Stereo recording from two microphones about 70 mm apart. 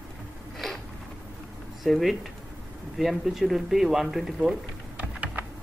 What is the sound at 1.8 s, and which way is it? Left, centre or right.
Speech, centre.